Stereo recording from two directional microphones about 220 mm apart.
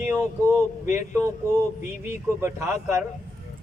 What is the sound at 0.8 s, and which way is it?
A man's voice, 10° right (ahead or behind).